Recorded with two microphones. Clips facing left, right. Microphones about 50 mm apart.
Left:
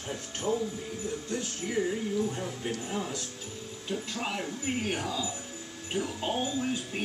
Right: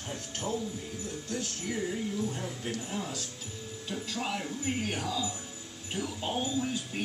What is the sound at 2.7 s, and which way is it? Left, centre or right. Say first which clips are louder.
Speech: left 2 dB; centre.